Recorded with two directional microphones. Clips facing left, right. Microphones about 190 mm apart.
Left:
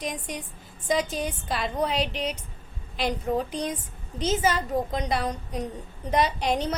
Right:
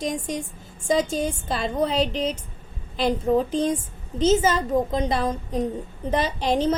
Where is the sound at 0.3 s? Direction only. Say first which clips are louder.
Right 6 dB; 25° right (ahead or behind).